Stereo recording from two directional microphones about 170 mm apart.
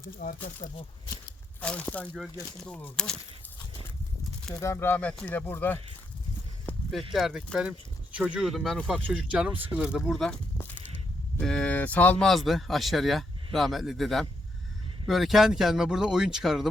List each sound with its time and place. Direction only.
0.2 s speech: 50° left (ahead or behind)
0.6 s speech: 35° left (ahead or behind)
1.6 s speech: 10° left (ahead or behind)
4.5 s speech: 15° left (ahead or behind)
6.7 s a sound: 10° left (ahead or behind)
7.1 s speech: centre (ahead or behind)